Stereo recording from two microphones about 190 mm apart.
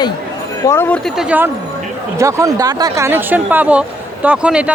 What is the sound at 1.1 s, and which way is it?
Speech, 10° right (ahead or behind).